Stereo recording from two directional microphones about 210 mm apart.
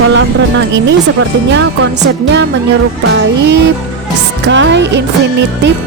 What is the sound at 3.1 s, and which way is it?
Music, 55° right (ahead or behind).